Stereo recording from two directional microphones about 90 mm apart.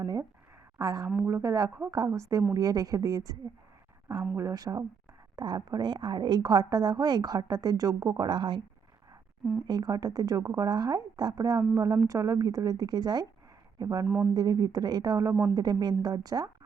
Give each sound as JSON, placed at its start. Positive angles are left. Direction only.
{"t": 0.0, "sound": "a woman's voice", "side_deg": -45}
{"t": 4.4, "sound": "a woman's voice", "side_deg": -40}
{"t": 9.6, "sound": "speech", "side_deg": -50}